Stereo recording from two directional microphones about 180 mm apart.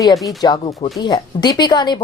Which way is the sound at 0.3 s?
25° left (ahead or behind).